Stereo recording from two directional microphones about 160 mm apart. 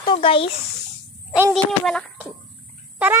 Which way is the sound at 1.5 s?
5° left (ahead or behind).